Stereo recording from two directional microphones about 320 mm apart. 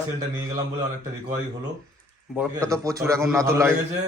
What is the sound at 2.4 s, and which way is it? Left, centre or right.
Speech, centre.